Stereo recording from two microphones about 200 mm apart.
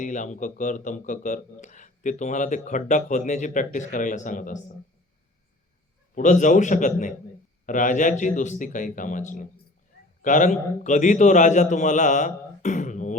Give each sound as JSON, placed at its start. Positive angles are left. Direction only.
{"t": 0.0, "sound": "a man's voice", "side_deg": 40}
{"t": 6.1, "sound": "a man's voice", "side_deg": 40}